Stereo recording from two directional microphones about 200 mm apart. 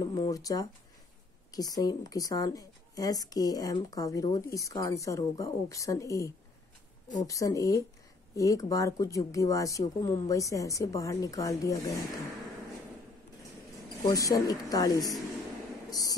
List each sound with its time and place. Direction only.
0.0 s a woman's voice: 20° left (ahead or behind)
14.0 s a woman's voice: 15° left (ahead or behind)
15.9 s a sound: 20° left (ahead or behind)